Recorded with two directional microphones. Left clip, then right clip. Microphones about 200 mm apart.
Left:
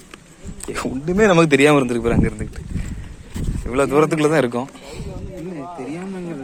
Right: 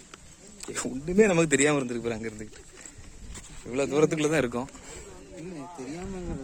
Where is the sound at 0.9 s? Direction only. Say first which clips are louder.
Left 7 dB; 5° right (ahead or behind).